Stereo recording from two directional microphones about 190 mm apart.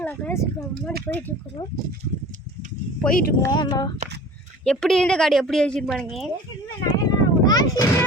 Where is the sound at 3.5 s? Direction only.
25° left (ahead or behind).